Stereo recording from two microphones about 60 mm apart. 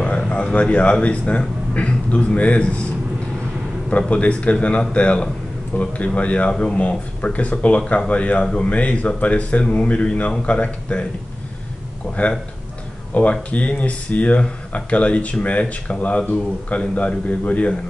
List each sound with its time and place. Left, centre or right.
0.0 s speech: centre
4.1 s speech: left
12.2 s speech: left